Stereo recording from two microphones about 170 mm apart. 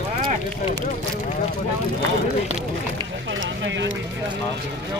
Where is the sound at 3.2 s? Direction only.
90° right.